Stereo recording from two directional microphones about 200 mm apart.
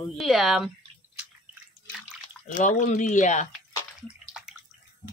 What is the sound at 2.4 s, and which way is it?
Speech, 40° left (ahead or behind).